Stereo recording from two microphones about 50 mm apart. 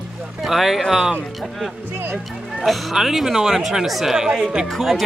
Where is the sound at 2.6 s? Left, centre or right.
Centre.